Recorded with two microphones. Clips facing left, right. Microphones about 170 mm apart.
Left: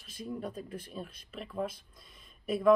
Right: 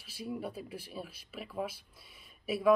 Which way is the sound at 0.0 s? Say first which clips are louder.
Even; 5° right (ahead or behind).